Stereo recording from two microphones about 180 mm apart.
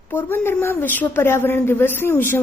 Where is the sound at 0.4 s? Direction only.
10° left (ahead or behind).